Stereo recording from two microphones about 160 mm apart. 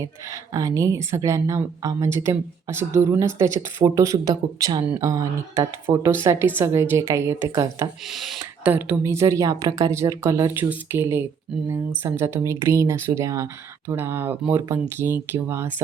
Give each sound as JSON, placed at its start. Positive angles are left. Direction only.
{"t": 0.5, "sound": "a woman's voice", "side_deg": -20}
{"t": 8.1, "sound": "speech", "side_deg": 0}
{"t": 8.6, "sound": "speech", "side_deg": -10}